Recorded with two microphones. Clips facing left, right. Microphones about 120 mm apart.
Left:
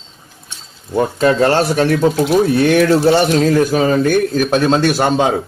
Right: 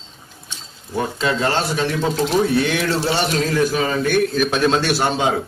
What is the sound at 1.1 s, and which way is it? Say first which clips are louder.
Speech: left 8 dB; 55° left (ahead or behind).